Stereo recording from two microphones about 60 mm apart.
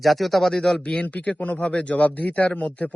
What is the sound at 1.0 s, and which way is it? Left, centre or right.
A man's voice, left.